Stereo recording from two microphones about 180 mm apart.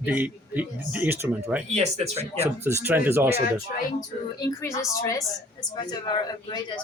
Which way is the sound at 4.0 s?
20° left (ahead or behind).